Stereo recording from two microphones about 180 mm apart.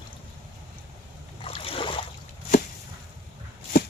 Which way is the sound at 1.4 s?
30° left (ahead or behind).